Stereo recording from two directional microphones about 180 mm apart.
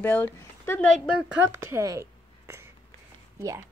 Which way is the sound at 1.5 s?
15° right (ahead or behind).